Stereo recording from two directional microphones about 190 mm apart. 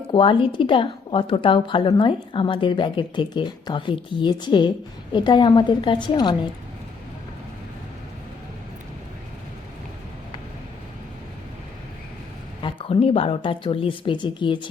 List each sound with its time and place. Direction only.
0.1 s a woman's voice: 25° left (ahead or behind)
12.6 s a woman's voice: 30° left (ahead or behind)